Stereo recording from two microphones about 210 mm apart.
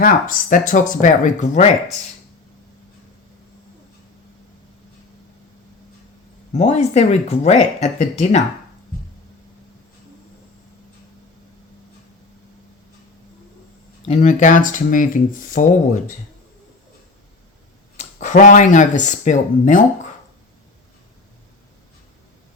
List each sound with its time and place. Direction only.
0.0 s speech: 40° left (ahead or behind)
6.5 s speech: 35° left (ahead or behind)
14.1 s speech: 35° left (ahead or behind)
17.9 s speech: 35° left (ahead or behind)